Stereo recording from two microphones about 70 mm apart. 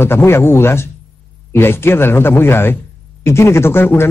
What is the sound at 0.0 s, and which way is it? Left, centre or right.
A man's voice, left.